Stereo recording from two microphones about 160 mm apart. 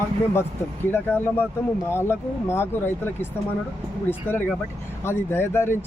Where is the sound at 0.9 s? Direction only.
10° left (ahead or behind).